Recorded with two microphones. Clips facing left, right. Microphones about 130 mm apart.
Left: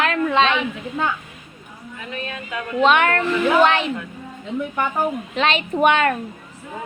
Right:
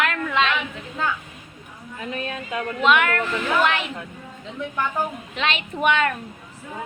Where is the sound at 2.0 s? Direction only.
35° right (ahead or behind).